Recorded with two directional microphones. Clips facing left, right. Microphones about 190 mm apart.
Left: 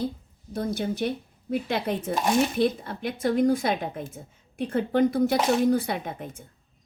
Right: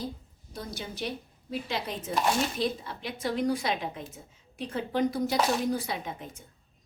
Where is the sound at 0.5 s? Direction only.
55° left (ahead or behind).